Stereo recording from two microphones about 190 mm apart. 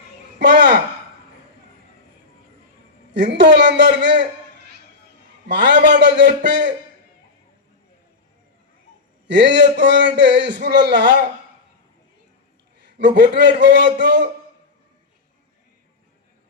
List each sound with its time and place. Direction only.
0.3 s a sound: 65° right (ahead or behind)
3.1 s a man's voice: 65° right (ahead or behind)
5.5 s a man's voice: 65° right (ahead or behind)
9.2 s a man's voice: 65° right (ahead or behind)
13.0 s a man's voice: 65° right (ahead or behind)